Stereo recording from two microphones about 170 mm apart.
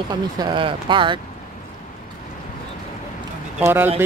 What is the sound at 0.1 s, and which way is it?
Speech, 25° right (ahead or behind).